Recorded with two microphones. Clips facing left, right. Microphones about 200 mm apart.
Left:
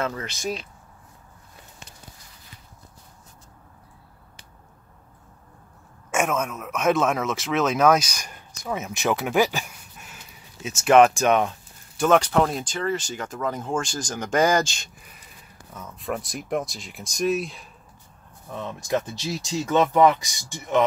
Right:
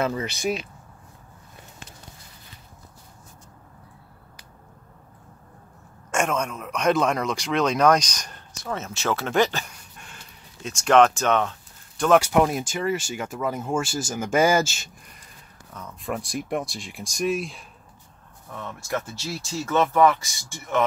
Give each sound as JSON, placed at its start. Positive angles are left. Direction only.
{"t": 0.0, "sound": "speech", "side_deg": -10}
{"t": 6.1, "sound": "speech", "side_deg": 5}
{"t": 12.2, "sound": "speech", "side_deg": -10}
{"t": 18.5, "sound": "speech", "side_deg": 20}